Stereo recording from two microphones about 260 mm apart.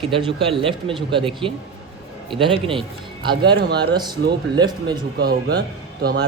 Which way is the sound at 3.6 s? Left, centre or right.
Right.